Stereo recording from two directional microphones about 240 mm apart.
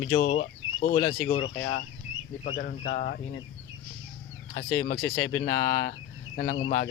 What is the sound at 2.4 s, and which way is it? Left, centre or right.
Speech, left.